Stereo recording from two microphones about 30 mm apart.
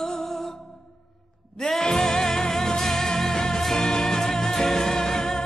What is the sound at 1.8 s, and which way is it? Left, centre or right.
Music, centre.